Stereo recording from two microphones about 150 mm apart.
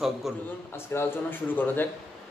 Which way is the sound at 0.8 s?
15° left (ahead or behind).